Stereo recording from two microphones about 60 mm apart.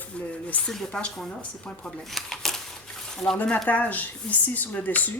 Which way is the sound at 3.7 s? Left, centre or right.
Left.